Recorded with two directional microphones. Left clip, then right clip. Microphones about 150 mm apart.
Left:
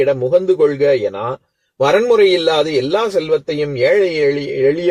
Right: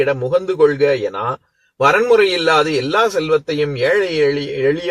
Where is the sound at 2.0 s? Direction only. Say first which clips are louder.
Left 1 dB; 25° left (ahead or behind).